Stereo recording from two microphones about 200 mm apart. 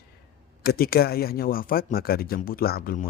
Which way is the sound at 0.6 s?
50° left (ahead or behind).